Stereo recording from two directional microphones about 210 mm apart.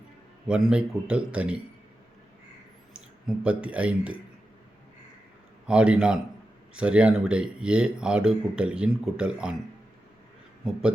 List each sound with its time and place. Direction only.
0.4 s speech: 5° right (ahead or behind)
3.2 s speech: 5° right (ahead or behind)
5.6 s speech: 5° right (ahead or behind)